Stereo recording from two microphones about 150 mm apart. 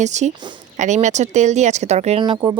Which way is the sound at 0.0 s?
50° right (ahead or behind).